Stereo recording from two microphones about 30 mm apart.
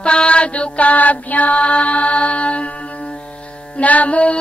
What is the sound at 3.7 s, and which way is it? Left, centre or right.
Music, left.